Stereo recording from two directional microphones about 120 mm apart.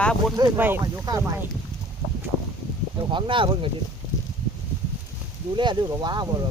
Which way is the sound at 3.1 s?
45° right (ahead or behind).